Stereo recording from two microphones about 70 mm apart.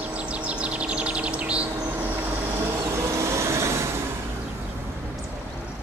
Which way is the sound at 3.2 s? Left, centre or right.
Right.